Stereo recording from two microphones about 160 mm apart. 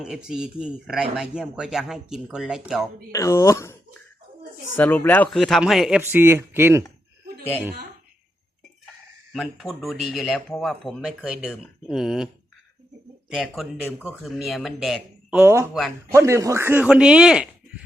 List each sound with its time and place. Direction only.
0.0 s speech: 5° right (ahead or behind)
3.1 s speech: 20° left (ahead or behind)
4.8 s speech: 10° left (ahead or behind)
6.0 s speech: 15° right (ahead or behind)
9.3 s speech: centre (ahead or behind)
13.3 s speech: centre (ahead or behind)